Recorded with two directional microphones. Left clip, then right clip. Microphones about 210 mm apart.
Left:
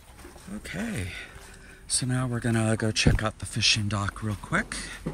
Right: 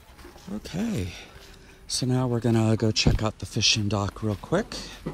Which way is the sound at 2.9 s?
25° right (ahead or behind).